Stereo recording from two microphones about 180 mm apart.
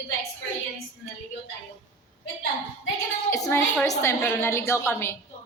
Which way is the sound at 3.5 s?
15° left (ahead or behind).